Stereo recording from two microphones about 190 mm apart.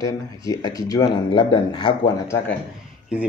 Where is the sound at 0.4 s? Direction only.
20° left (ahead or behind).